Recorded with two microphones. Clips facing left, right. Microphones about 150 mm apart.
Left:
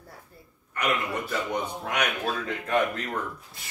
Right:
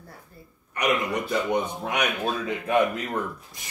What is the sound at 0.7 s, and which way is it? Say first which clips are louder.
A man's voice: right 3 dB; 15° right (ahead or behind).